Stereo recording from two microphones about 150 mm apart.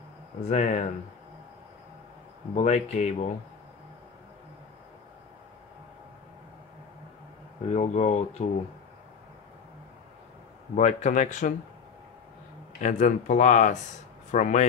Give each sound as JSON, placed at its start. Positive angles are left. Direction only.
{"t": 0.5, "sound": "speech", "side_deg": 55}
{"t": 2.5, "sound": "speech", "side_deg": 50}
{"t": 7.7, "sound": "speech", "side_deg": 50}
{"t": 10.8, "sound": "speech", "side_deg": 55}
{"t": 12.8, "sound": "speech", "side_deg": 55}